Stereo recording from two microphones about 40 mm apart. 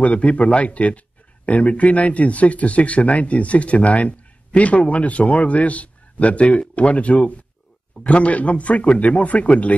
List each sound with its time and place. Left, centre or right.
0.0 s speech: left